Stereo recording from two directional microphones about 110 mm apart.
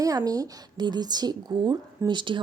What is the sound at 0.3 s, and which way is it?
Speech, 35° right (ahead or behind).